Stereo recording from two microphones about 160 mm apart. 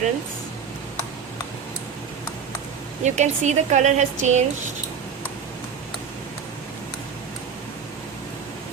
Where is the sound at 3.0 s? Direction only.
45° right (ahead or behind).